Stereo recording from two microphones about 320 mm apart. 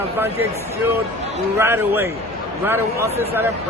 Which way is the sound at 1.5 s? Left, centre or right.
Centre.